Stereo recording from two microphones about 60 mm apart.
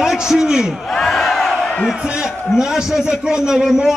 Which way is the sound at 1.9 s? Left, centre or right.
Centre.